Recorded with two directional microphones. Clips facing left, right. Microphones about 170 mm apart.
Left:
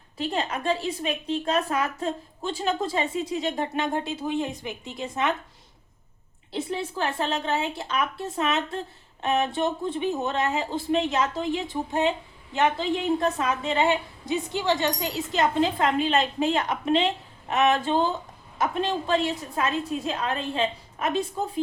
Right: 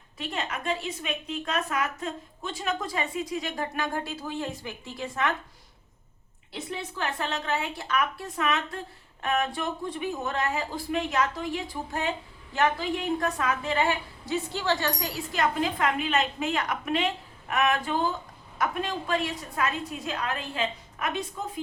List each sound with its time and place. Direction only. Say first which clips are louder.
0.2 s a woman's voice: left 5 dB; 30° left (ahead or behind)
6.5 s a woman's voice: left 6 dB; 30° left (ahead or behind)